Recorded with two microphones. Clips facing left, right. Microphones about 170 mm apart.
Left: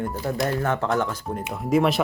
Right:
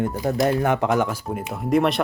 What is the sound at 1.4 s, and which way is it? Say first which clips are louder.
Speech: right 1 dB; centre (ahead or behind).